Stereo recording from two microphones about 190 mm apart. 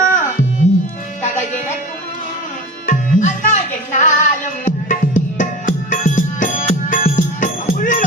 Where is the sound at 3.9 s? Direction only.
40° left (ahead or behind).